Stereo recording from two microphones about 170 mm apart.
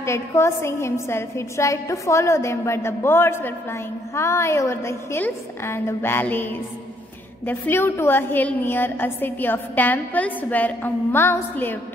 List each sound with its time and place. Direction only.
0.0 s a woman's voice: 15° left (ahead or behind)